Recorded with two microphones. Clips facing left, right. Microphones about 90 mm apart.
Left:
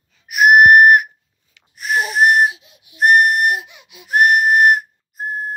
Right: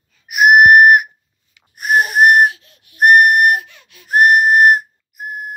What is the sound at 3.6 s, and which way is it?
Whistle, 15° left (ahead or behind).